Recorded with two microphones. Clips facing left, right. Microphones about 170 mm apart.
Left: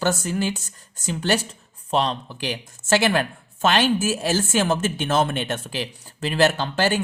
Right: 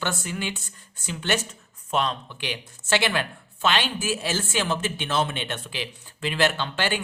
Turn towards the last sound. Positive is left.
turn(degrees=40)  # may be behind; listen again after turning